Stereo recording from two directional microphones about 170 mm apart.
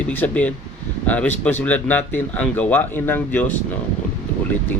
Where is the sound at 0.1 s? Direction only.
10° left (ahead or behind).